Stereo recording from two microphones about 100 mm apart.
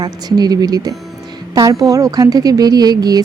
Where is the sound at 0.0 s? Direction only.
40° right (ahead or behind).